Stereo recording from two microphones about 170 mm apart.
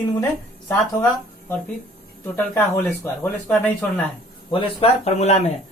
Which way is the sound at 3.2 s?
10° left (ahead or behind).